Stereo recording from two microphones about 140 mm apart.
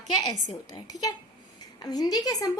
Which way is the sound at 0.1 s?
30° left (ahead or behind).